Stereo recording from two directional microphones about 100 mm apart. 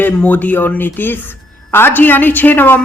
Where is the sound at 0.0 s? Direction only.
15° left (ahead or behind).